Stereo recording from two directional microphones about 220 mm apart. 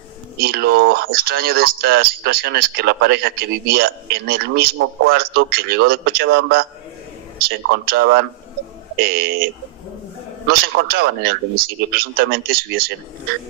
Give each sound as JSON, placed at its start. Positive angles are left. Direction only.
{"t": 0.4, "sound": "speech", "side_deg": -45}
{"t": 10.9, "sound": "speech", "side_deg": -45}